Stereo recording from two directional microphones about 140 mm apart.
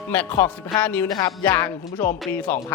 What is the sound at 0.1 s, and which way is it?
Speech, 15° left (ahead or behind).